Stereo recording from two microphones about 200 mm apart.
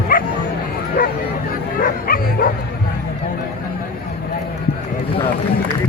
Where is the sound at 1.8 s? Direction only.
45° left (ahead or behind).